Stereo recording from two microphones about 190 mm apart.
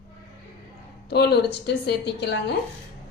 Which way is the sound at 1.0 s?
60° left (ahead or behind).